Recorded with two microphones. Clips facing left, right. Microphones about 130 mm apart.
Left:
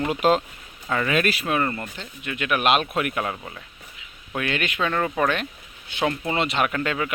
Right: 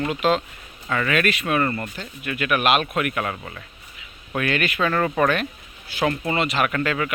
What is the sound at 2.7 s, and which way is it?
Speech, centre (ahead or behind).